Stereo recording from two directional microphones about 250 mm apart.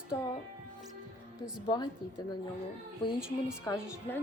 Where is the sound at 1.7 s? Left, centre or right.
Centre.